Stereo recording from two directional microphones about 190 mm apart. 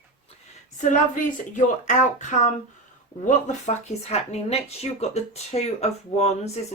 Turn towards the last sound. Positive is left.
turn(degrees=35)  # may be behind; listen again after turning